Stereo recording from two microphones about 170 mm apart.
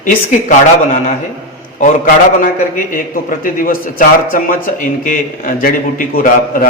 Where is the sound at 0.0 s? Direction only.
50° left (ahead or behind).